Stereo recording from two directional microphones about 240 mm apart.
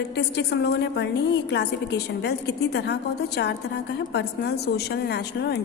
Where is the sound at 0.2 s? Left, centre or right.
Left.